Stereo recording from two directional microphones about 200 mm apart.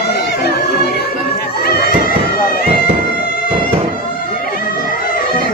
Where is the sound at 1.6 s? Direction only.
50° left (ahead or behind).